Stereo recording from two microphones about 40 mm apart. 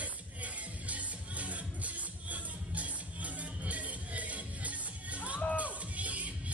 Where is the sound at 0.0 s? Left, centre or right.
Right.